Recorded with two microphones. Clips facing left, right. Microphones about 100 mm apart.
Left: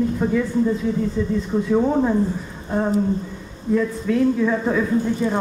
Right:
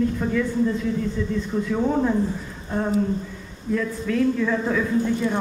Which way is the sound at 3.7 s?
10° left (ahead or behind).